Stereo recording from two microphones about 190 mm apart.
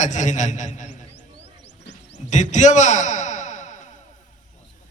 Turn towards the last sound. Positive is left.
turn(degrees=40)  # may be behind; listen again after turning